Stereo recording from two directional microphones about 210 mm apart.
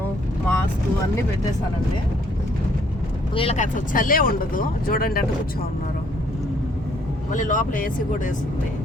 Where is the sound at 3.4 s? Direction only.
30° left (ahead or behind).